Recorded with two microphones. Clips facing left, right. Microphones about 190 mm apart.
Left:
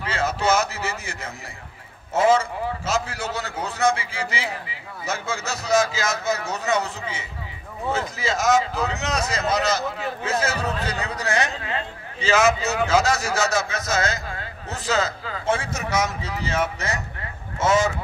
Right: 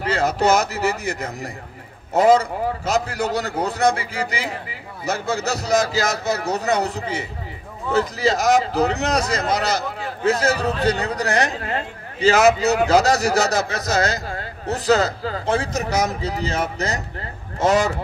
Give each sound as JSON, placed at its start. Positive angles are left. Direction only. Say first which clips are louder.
{"t": 0.0, "sound": "a man's voice", "louder": "right 5 dB", "side_deg": -35}